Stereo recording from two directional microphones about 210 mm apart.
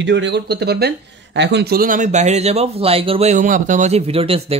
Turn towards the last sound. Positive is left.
turn(degrees=-25)  # may be behind; listen again after turning